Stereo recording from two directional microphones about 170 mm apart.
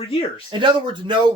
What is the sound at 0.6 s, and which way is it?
Speech, 25° right (ahead or behind).